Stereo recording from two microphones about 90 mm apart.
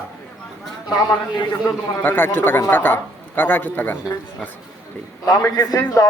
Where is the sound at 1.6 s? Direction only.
20° left (ahead or behind).